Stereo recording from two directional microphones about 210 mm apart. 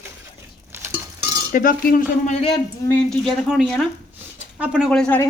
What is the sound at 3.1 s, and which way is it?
Speech, centre (ahead or behind).